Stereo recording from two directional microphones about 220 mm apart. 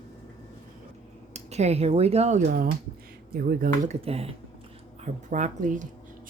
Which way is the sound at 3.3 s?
40° right (ahead or behind).